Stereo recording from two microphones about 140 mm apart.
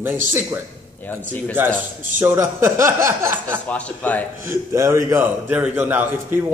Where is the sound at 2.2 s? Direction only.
15° right (ahead or behind).